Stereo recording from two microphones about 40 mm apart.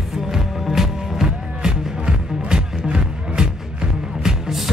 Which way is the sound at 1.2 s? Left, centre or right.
Centre.